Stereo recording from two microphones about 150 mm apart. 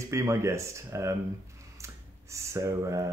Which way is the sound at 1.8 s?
20° right (ahead or behind).